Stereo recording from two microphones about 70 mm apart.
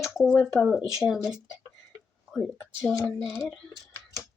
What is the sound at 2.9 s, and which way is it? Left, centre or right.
Speech, centre.